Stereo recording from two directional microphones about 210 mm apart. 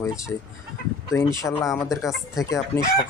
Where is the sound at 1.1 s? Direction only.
15° left (ahead or behind).